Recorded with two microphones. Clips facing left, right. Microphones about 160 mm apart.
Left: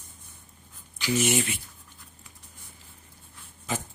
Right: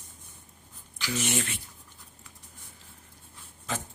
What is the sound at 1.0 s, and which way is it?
Speech, 10° left (ahead or behind).